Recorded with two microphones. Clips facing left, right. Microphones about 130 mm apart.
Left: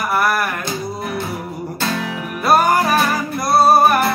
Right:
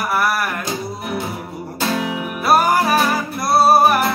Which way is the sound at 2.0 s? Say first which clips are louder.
Right 1 dB; 15° right (ahead or behind).